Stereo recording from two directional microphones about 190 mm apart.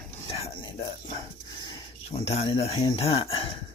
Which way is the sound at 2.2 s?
30° left (ahead or behind).